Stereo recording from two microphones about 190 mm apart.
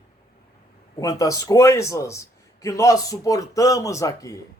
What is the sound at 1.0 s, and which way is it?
Speech, 20° left (ahead or behind).